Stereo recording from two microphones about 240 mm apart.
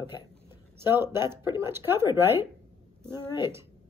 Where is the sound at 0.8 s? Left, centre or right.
Centre.